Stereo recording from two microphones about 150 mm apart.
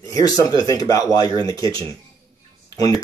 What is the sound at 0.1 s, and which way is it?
Speech, 25° left (ahead or behind).